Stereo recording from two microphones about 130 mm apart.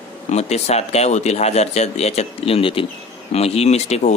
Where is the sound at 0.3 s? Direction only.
55° left (ahead or behind).